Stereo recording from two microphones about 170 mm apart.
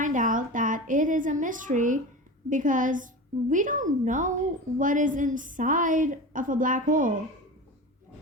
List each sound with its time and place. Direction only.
0.0 s a woman's voice: 50° right (ahead or behind)